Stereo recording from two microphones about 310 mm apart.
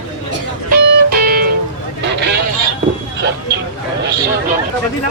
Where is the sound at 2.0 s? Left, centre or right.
Right.